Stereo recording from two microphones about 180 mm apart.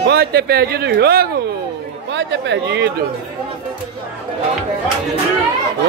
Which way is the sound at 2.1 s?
75° right (ahead or behind).